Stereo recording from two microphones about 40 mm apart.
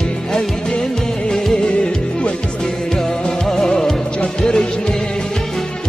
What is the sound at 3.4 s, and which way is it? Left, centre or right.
Music, centre.